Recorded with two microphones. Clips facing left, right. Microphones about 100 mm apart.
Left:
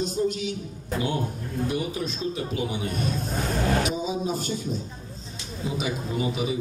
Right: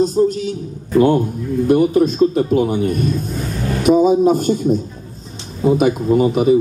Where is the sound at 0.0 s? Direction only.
40° right (ahead or behind).